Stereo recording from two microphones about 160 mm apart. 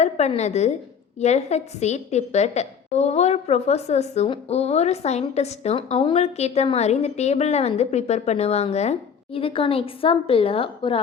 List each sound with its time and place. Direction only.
0.0 s a woman's voice: 45° left (ahead or behind)